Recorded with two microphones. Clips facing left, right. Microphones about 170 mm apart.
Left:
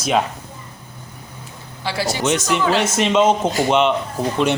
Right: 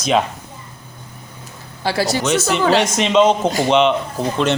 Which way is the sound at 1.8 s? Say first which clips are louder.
Right 4 dB; 40° right (ahead or behind).